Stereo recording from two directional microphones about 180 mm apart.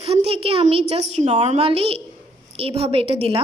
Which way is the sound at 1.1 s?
35° right (ahead or behind).